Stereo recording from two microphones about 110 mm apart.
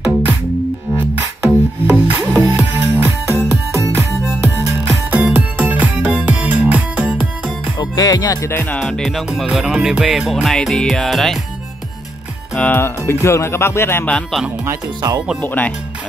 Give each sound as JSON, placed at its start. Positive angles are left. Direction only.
{"t": 0.9, "sound": "music", "side_deg": -15}
{"t": 7.7, "sound": "music", "side_deg": 40}
{"t": 8.7, "sound": "music", "side_deg": 5}
{"t": 12.5, "sound": "speech", "side_deg": 10}
{"t": 12.8, "sound": "speech", "side_deg": 25}
{"t": 15.0, "sound": "speech", "side_deg": -35}
{"t": 15.4, "sound": "speech", "side_deg": 15}